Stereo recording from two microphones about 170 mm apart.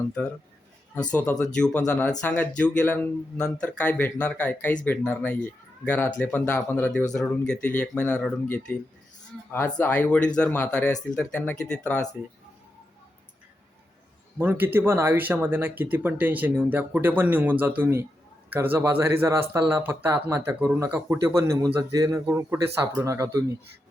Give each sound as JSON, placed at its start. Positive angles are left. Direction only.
{"t": 1.1, "sound": "speech", "side_deg": 10}
{"t": 14.3, "sound": "speech", "side_deg": -10}